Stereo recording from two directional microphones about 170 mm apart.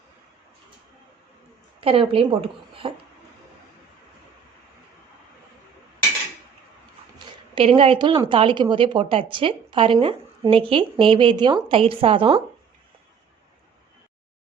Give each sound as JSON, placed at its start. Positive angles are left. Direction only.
{"t": 1.8, "sound": "speech", "side_deg": -35}
{"t": 7.5, "sound": "speech", "side_deg": -35}